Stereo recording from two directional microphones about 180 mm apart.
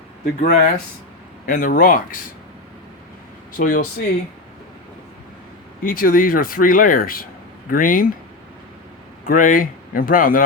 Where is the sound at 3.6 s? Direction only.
50° left (ahead or behind).